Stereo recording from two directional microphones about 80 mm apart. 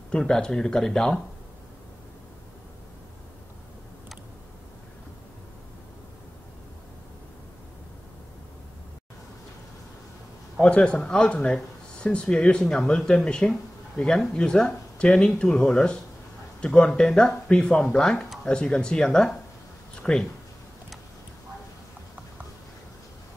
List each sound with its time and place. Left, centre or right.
0.1 s speech: centre
10.6 s speech: centre